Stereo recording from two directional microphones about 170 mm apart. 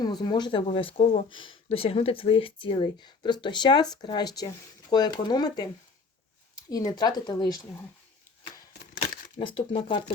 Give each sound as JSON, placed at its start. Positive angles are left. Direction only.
{"t": 0.0, "sound": "speech", "side_deg": 25}
{"t": 6.7, "sound": "speech", "side_deg": 20}
{"t": 9.4, "sound": "speech", "side_deg": 30}